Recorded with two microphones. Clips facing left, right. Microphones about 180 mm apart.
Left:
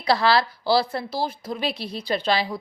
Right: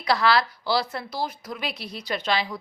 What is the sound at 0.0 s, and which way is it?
Speech, 30° left (ahead or behind).